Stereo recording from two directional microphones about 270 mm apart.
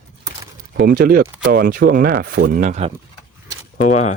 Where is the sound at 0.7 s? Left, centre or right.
Right.